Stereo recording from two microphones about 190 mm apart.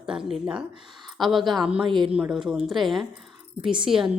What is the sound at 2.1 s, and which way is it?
Speech, 5° right (ahead or behind).